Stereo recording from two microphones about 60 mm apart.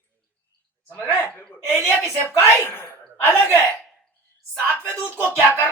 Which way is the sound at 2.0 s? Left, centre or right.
Left.